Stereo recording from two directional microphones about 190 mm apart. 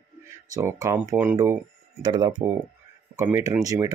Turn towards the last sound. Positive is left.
turn(degrees=-20)  # may be behind; listen again after turning